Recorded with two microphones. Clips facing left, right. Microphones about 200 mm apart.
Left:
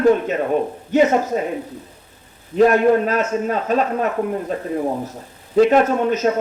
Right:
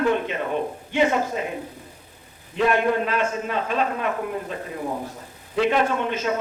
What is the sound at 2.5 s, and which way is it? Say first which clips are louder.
A man's voice: left 7 dB; 40° left (ahead or behind).